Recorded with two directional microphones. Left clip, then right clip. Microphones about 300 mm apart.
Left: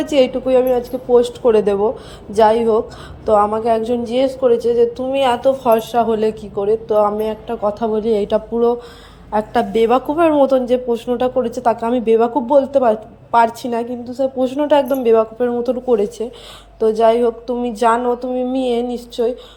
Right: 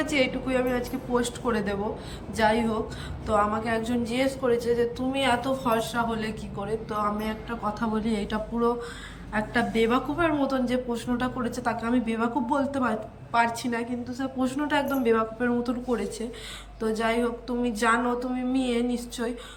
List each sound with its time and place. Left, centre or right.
0.0 s a woman's voice: centre